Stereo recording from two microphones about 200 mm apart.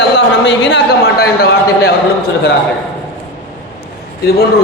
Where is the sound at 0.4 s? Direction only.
65° left (ahead or behind).